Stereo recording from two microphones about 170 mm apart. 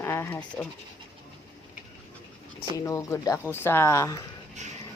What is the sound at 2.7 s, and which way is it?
A woman's voice, 20° left (ahead or behind).